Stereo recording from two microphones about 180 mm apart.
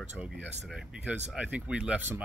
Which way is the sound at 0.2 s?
5° right (ahead or behind).